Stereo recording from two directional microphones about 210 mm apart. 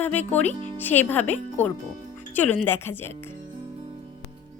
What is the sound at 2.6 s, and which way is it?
Speech, 10° left (ahead or behind).